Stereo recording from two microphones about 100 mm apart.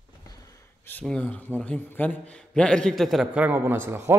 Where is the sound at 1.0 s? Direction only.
10° left (ahead or behind).